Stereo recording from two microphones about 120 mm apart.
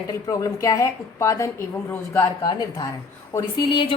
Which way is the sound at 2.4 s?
35° left (ahead or behind).